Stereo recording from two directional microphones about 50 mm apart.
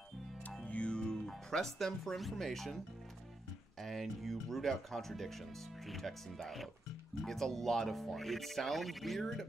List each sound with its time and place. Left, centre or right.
0.7 s music: left
1.2 s speech: centre
3.8 s speech: centre